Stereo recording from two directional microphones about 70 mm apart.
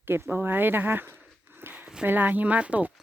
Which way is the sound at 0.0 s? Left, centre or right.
Right.